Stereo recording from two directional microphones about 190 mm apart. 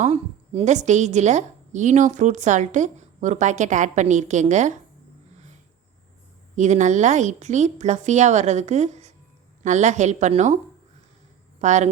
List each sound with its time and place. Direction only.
0.0 s a woman's voice: 35° right (ahead or behind)
6.6 s a woman's voice: 40° right (ahead or behind)
11.6 s a woman's voice: 40° right (ahead or behind)